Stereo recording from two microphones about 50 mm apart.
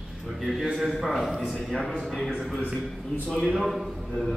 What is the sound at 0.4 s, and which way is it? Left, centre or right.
A man's voice, centre.